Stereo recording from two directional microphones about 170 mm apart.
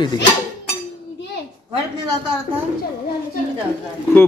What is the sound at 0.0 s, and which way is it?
Speech, 25° left (ahead or behind).